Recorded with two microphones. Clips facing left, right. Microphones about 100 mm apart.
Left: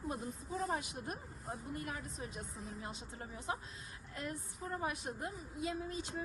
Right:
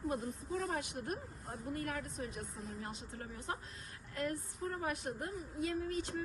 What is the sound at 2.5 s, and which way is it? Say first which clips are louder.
Speech: right 1 dB; centre (ahead or behind).